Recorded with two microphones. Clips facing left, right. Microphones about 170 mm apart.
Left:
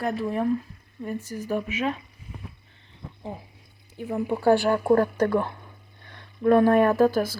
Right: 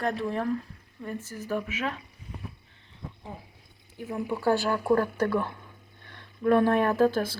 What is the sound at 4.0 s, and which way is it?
Speech, 20° left (ahead or behind).